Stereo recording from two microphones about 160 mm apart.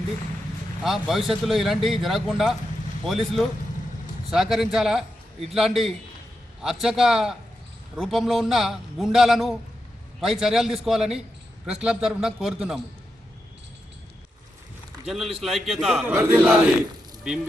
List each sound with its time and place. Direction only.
0.9 s a man's voice: centre (ahead or behind)
15.0 s a man's voice: centre (ahead or behind)
16.0 s chant: 5° right (ahead or behind)